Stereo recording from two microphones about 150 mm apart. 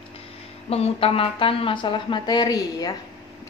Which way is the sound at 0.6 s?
40° left (ahead or behind).